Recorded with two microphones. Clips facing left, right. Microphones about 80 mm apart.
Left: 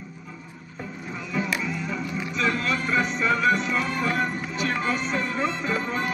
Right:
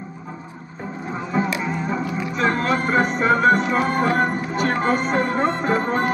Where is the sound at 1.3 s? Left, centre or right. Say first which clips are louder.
Right 5 dB; right.